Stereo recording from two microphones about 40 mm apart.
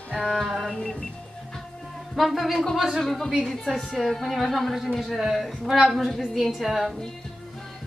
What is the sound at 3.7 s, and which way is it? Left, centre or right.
Speech, centre.